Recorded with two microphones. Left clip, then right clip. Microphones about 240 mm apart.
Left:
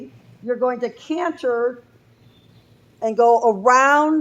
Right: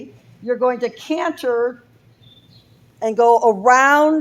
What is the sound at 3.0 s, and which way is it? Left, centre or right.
Speech, right.